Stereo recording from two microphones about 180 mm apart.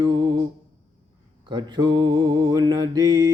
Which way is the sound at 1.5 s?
25° right (ahead or behind).